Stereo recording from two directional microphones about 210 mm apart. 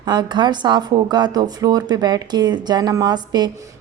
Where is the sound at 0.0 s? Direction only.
20° right (ahead or behind).